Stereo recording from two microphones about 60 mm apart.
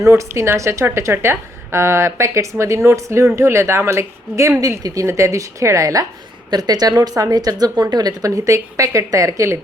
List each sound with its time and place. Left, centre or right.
0.0 s a woman's voice: right
6.6 s speech: right